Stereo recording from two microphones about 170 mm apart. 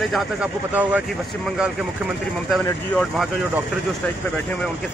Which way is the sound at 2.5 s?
Centre (ahead or behind).